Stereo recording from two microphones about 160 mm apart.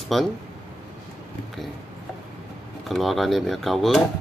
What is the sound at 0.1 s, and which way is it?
Speech, centre (ahead or behind).